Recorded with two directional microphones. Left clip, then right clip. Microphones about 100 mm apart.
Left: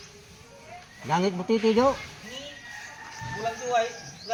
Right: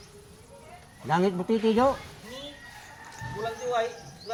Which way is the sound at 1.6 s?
Centre (ahead or behind).